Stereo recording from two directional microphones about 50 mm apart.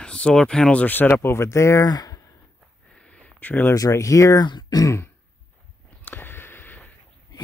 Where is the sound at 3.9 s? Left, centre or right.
Left.